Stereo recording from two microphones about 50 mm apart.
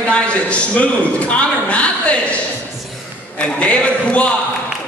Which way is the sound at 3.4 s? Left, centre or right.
Left.